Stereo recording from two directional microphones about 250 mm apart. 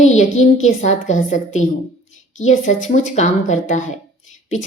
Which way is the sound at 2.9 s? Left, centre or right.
Left.